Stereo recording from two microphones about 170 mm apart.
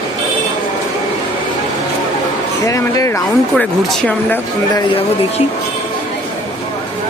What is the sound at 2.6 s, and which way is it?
Speech, 20° left (ahead or behind).